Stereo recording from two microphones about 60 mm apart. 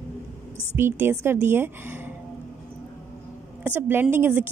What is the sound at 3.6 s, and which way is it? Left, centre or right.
Speech, right.